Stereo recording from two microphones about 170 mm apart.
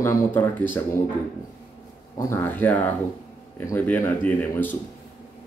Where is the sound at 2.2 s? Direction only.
15° left (ahead or behind).